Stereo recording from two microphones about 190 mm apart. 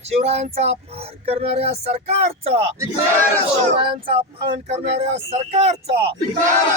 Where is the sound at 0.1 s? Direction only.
35° right (ahead or behind).